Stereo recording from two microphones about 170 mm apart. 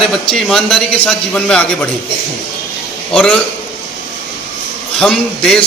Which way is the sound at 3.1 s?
5° left (ahead or behind).